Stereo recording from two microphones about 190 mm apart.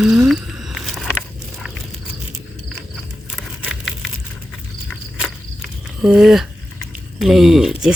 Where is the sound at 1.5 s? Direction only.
Centre (ahead or behind).